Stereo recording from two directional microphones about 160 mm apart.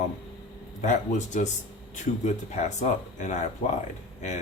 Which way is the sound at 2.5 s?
50° left (ahead or behind).